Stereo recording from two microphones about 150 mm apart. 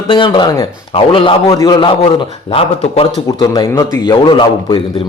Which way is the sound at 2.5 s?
40° left (ahead or behind).